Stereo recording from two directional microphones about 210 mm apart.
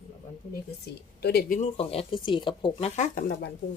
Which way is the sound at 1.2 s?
50° left (ahead or behind).